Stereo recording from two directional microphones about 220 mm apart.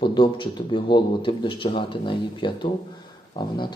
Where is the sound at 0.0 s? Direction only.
20° left (ahead or behind).